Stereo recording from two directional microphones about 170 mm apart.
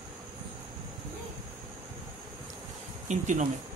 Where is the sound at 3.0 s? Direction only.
45° right (ahead or behind).